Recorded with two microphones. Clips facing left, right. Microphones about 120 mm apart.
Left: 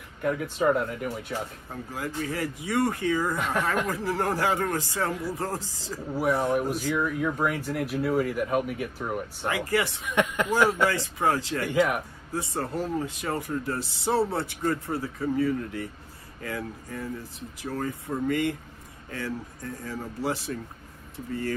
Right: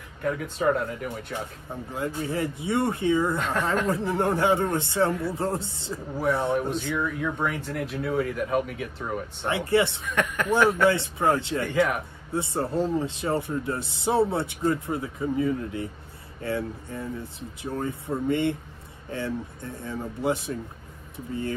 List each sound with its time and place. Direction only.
0.2 s speech: 5° left (ahead or behind)
1.7 s speech: 25° right (ahead or behind)
6.5 s speech: 10° left (ahead or behind)
9.5 s speech: 25° right (ahead or behind)
10.0 s speech: 15° left (ahead or behind)
10.9 s speech: 20° right (ahead or behind)